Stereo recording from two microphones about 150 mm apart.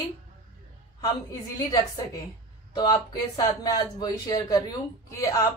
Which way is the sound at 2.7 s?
25° left (ahead or behind).